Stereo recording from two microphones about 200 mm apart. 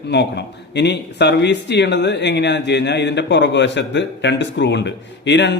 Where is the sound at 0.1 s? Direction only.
55° left (ahead or behind).